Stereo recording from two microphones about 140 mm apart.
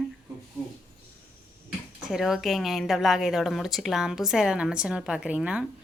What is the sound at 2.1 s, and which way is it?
Speech, centre (ahead or behind).